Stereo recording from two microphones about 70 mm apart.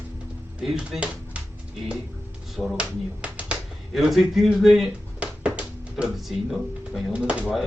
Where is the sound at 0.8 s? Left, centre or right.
Centre.